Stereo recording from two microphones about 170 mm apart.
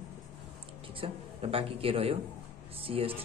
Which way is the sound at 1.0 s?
35° right (ahead or behind).